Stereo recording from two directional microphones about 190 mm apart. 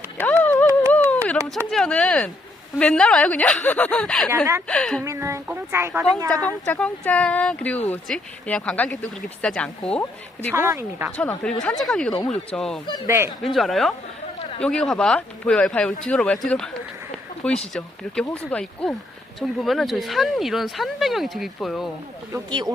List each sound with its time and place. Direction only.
0.2 s a sound: 10° left (ahead or behind)
2.7 s speech: 5° left (ahead or behind)
5.0 s a woman's voice: 15° right (ahead or behind)
6.7 s speech: 5° left (ahead or behind)
10.5 s a woman's voice: 15° right (ahead or behind)
11.2 s speech: 5° left (ahead or behind)
13.1 s a woman's voice: 15° right (ahead or behind)
13.4 s speech: centre (ahead or behind)
22.3 s speech: 20° right (ahead or behind)